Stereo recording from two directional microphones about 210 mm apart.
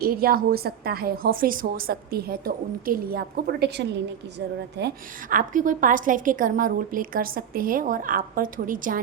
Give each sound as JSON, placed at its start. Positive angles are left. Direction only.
{"t": 0.0, "sound": "a woman's voice", "side_deg": -45}
{"t": 5.3, "sound": "a woman's voice", "side_deg": -40}